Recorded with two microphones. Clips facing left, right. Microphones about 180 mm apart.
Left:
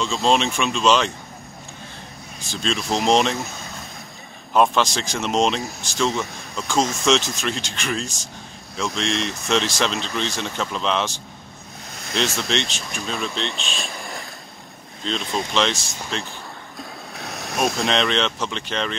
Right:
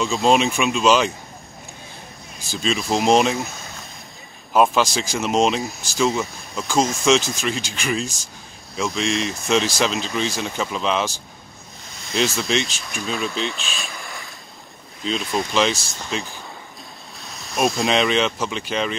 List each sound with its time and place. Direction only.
0.0 s speech: 5° right (ahead or behind)
2.5 s speech: 5° right (ahead or behind)
4.6 s speech: 5° right (ahead or behind)
17.1 s vehicle: 70° left (ahead or behind)
17.6 s speech: 5° right (ahead or behind)